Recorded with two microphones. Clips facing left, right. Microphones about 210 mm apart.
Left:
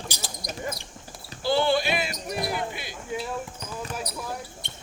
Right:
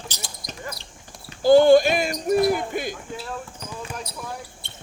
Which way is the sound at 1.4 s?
45° right (ahead or behind).